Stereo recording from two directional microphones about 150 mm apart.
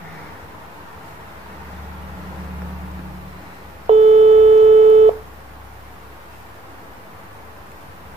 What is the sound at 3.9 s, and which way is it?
Busy signal, 45° right (ahead or behind).